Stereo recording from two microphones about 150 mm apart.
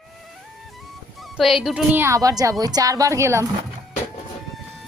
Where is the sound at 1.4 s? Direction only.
Centre (ahead or behind); by 3.4 s 20° right (ahead or behind).